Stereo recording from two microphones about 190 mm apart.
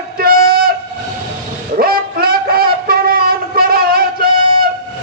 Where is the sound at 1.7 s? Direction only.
50° right (ahead or behind).